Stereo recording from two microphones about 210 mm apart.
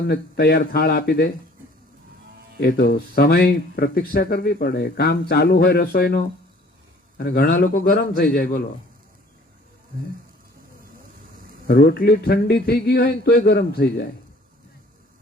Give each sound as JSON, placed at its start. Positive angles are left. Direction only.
{"t": 0.1, "sound": "speech", "side_deg": 45}
{"t": 2.6, "sound": "speech", "side_deg": 45}
{"t": 11.7, "sound": "speech", "side_deg": 45}